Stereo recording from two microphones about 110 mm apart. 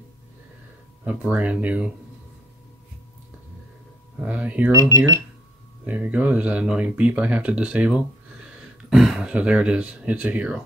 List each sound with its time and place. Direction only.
1.0 s speech: 15° right (ahead or behind)
4.2 s speech: 15° right (ahead or behind)
4.7 s speech: 30° right (ahead or behind)
5.9 s speech: 15° right (ahead or behind)